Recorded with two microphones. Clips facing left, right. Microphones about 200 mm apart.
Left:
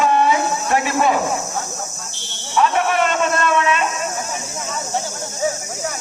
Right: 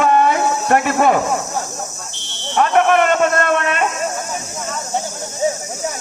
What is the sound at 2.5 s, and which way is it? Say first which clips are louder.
Buzzer: right 4 dB; 55° right (ahead or behind).